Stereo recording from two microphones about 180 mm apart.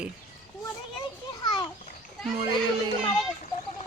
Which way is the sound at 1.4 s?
25° left (ahead or behind).